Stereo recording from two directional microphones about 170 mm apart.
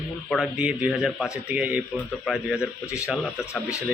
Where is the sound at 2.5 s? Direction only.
15° left (ahead or behind).